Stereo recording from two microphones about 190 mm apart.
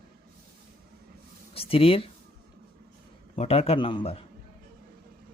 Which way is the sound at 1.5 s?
30° left (ahead or behind).